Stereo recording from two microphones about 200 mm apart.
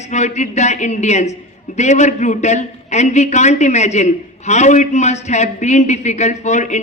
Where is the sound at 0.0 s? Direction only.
35° left (ahead or behind).